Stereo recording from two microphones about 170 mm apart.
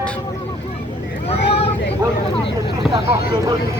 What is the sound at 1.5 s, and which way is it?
Vehicle, 35° left (ahead or behind).